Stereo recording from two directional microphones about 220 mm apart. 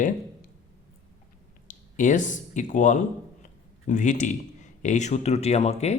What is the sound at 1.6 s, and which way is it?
A man's voice, 35° left (ahead or behind).